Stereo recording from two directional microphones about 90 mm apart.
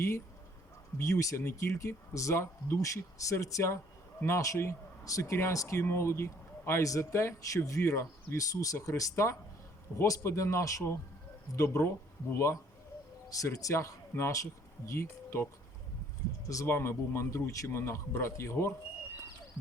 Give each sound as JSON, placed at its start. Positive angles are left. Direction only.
{"t": 0.9, "sound": "speech", "side_deg": 35}
{"t": 16.6, "sound": "speech", "side_deg": 25}